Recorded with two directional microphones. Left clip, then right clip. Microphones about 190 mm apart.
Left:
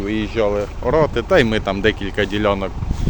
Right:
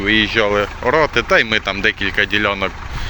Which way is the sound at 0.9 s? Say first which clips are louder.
Right 1 dB; 20° left (ahead or behind).